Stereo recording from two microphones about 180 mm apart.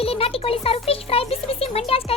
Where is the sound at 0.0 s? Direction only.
30° left (ahead or behind).